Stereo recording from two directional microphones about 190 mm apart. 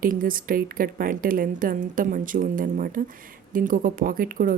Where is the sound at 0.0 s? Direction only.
45° right (ahead or behind).